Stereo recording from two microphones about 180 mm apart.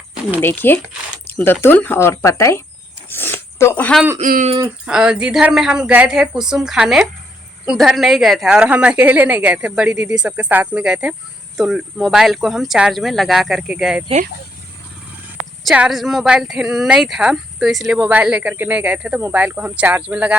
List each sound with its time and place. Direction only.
0.4 s speech: 10° left (ahead or behind)
3.1 s a sound: 10° left (ahead or behind)
4.2 s speech: 45° right (ahead or behind)
4.9 s speech: 5° right (ahead or behind)
15.6 s speech: 5° right (ahead or behind)